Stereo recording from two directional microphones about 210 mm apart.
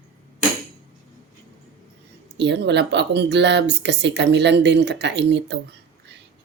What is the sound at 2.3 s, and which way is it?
Speech, 55° right (ahead or behind).